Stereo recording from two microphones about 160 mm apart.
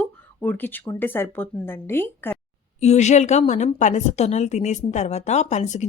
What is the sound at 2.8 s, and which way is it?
A woman's voice, 45° left (ahead or behind).